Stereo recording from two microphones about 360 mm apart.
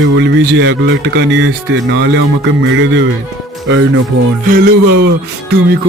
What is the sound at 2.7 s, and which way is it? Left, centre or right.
Speech, right.